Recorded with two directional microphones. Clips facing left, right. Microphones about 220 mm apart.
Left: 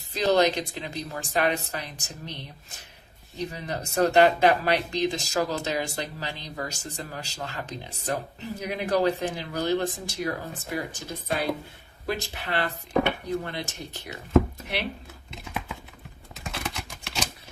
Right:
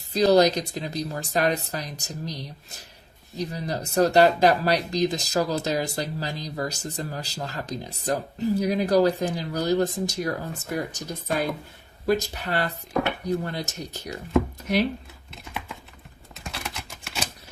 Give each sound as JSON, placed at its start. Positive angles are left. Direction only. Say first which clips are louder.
{"t": 0.1, "sound": "speech", "louder": "right 4 dB", "side_deg": -40}
{"t": 15.3, "sound": "typing", "louder": "left 2 dB", "side_deg": 0}